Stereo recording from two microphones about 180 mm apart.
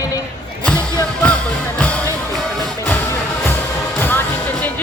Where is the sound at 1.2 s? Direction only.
5° left (ahead or behind).